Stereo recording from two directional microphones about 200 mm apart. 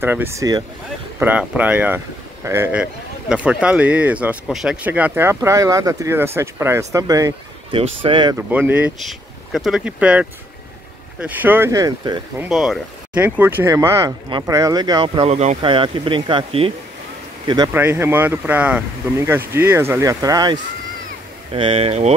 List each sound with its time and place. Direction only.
0.0 s a man's voice: 10° right (ahead or behind)
8.4 s a man's voice: 10° right (ahead or behind)
12.4 s a man's voice: 5° right (ahead or behind); by 16.7 s 25° right (ahead or behind)
17.7 s a man's voice: 10° right (ahead or behind)
21.5 s speech: 30° right (ahead or behind)